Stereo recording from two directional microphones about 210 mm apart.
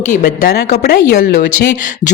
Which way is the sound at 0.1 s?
40° left (ahead or behind).